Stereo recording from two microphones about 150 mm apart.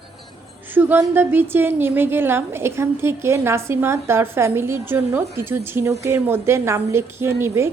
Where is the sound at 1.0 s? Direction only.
15° right (ahead or behind).